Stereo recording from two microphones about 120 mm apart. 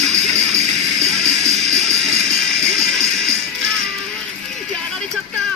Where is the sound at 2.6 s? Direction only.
5° left (ahead or behind).